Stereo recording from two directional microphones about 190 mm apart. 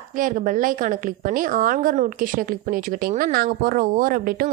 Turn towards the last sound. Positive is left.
turn(degrees=-50)  # may be behind; listen again after turning